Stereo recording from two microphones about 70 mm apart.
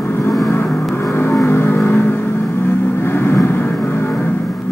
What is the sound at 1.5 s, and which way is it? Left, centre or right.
Music, left.